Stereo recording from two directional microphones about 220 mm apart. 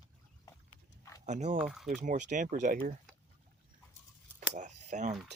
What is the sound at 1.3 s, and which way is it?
Speech, 30° right (ahead or behind).